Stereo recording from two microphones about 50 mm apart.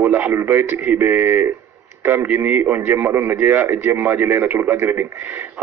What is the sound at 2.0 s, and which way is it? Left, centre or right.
Speech, right.